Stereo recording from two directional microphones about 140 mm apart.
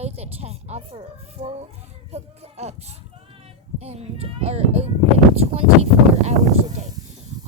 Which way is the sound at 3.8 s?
50° right (ahead or behind).